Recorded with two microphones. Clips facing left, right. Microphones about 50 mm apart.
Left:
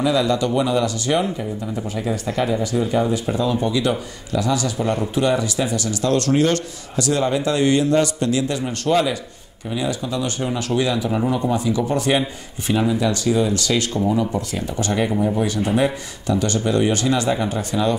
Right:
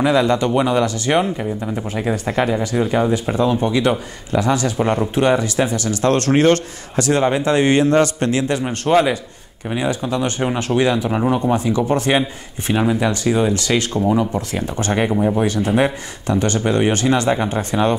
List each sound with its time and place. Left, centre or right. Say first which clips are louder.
0.0 s speech: right 3 dB; right